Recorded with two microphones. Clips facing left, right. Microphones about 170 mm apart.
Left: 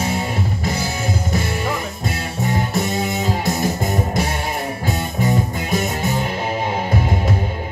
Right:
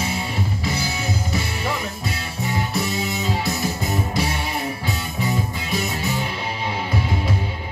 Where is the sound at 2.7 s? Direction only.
50° left (ahead or behind).